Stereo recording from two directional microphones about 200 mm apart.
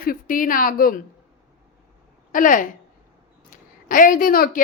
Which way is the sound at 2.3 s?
40° left (ahead or behind).